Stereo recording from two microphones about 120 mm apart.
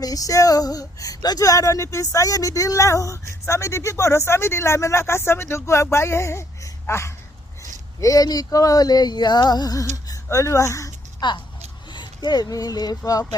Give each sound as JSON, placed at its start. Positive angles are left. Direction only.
{"t": 0.0, "sound": "speech", "side_deg": 30}
{"t": 11.2, "sound": "speech", "side_deg": 40}